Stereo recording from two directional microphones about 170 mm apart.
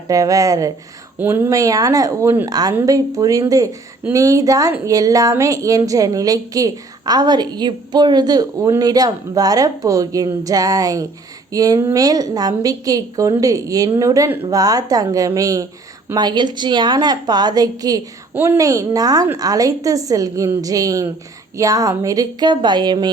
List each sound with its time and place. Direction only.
0.1 s a woman's voice: 20° right (ahead or behind)